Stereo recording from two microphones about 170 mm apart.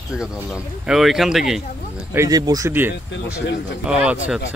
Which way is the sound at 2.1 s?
20° right (ahead or behind).